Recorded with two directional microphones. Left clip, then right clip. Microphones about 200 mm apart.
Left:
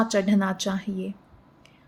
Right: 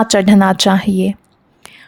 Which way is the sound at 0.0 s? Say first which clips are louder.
Right 12 dB; 55° right (ahead or behind).